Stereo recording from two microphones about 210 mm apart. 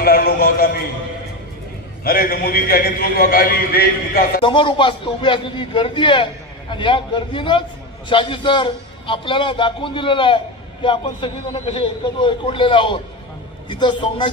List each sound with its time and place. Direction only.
0.0 s a man's voice: 45° left (ahead or behind)
2.0 s a man's voice: 45° left (ahead or behind)
4.4 s a man's voice: 25° left (ahead or behind)